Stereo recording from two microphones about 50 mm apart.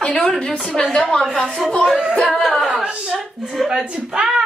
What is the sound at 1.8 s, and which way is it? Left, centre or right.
Speech, centre.